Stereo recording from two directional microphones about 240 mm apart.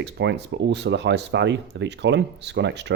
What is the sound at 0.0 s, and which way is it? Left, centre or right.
Speech, right.